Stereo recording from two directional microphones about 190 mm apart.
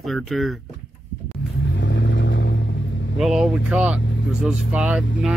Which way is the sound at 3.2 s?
Centre (ahead or behind).